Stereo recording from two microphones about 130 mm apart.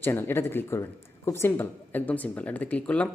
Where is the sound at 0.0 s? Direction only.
15° left (ahead or behind).